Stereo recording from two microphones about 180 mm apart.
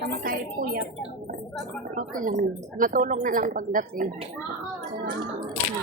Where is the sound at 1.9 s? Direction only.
50° right (ahead or behind).